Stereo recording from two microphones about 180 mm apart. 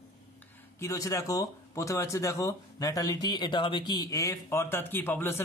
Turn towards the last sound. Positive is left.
turn(degrees=10)  # may be behind; listen again after turning